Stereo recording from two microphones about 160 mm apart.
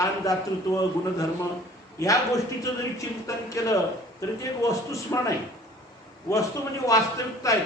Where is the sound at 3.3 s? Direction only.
20° left (ahead or behind).